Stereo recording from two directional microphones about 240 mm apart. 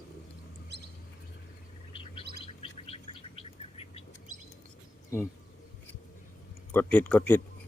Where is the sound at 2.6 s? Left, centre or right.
Left.